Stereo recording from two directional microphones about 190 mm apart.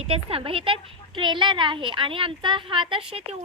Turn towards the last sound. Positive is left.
turn(degrees=-30)  # may be behind; listen again after turning